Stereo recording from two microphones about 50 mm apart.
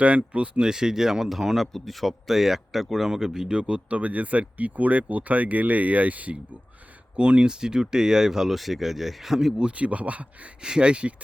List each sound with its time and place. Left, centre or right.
0.0 s a man's voice: right
0.6 s a man's voice: centre
9.6 s a man's voice: right
10.6 s a man's voice: centre